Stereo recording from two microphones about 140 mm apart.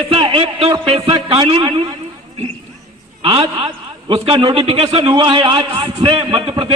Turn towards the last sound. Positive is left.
turn(degrees=-40)  # may be behind; listen again after turning